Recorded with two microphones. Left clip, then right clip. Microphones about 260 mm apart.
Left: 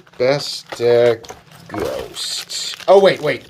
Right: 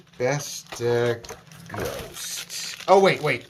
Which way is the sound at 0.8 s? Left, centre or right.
Centre.